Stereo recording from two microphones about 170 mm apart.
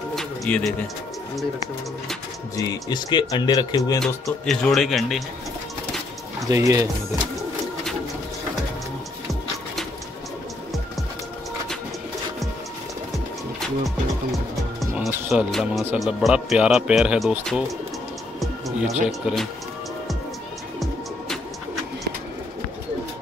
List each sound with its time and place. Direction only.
0.1 s music: 5° left (ahead or behind)
2.5 s speech: 25° left (ahead or behind)
4.0 s speech: centre (ahead or behind)
6.5 s speech: 20° right (ahead or behind)
13.6 s music: centre (ahead or behind)
16.0 s speech: centre (ahead or behind)
19.0 s speech: centre (ahead or behind)